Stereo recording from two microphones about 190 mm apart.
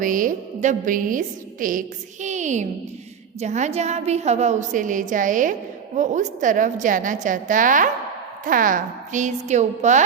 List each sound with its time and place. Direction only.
0.0 s a woman's voice: 45° right (ahead or behind)
2.2 s a sound: 40° right (ahead or behind)
3.4 s a woman's voice: 35° right (ahead or behind)